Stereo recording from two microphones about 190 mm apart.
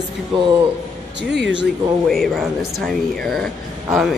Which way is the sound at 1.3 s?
70° right (ahead or behind).